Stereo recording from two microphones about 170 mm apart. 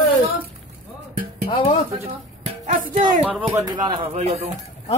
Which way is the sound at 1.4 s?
30° left (ahead or behind).